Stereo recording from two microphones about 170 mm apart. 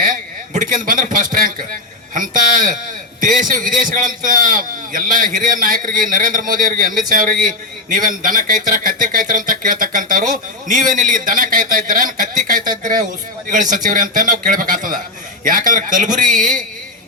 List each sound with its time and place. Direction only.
0.0 s a man's voice: 50° right (ahead or behind)